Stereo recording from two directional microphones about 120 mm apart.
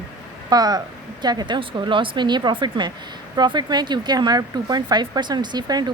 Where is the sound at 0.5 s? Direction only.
35° right (ahead or behind).